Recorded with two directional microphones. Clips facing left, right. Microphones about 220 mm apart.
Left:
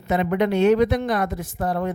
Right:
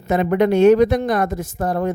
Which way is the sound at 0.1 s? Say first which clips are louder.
Right 4 dB; 45° right (ahead or behind).